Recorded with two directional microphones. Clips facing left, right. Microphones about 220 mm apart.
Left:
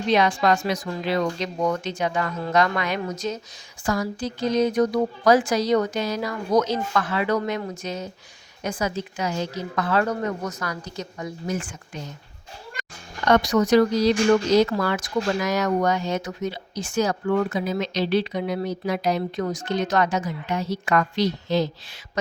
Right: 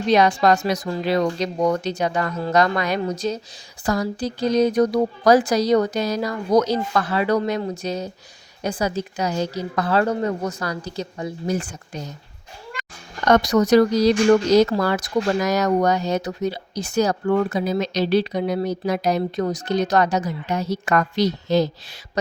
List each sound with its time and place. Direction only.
0.1 s speech: 40° right (ahead or behind)
13.2 s speech: 40° right (ahead or behind)